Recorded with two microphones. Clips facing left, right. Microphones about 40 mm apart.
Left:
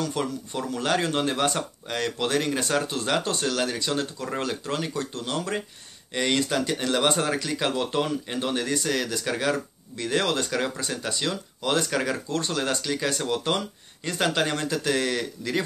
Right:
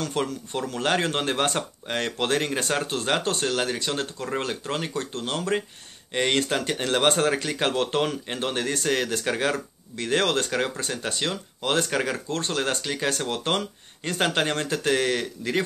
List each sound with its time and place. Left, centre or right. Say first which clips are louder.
0.2 s speech: right 1 dB; right
12.3 s speech: even; right